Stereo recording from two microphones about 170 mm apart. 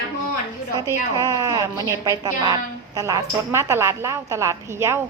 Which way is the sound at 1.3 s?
20° right (ahead or behind).